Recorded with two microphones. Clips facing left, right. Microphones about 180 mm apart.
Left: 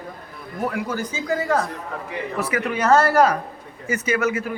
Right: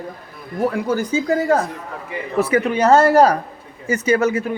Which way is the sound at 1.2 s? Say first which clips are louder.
Right 2 dB; 30° right (ahead or behind).